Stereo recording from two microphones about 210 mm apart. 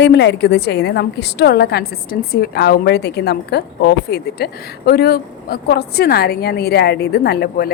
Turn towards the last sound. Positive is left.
turn(degrees=50)  # may be behind; listen again after turning